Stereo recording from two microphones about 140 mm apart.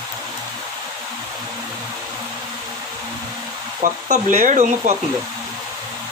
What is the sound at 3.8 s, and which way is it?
Speech, 60° right (ahead or behind).